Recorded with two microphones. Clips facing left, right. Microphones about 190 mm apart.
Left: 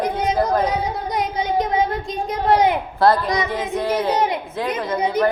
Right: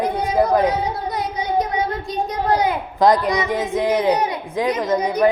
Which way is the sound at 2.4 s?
20° left (ahead or behind).